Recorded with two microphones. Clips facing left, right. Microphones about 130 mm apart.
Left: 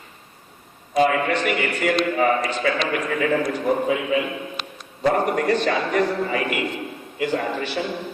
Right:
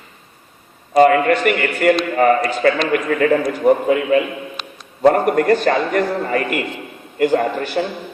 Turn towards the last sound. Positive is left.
turn(degrees=-50)  # may be behind; listen again after turning